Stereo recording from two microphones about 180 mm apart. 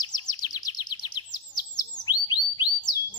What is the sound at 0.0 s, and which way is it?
Chirp, 20° left (ahead or behind).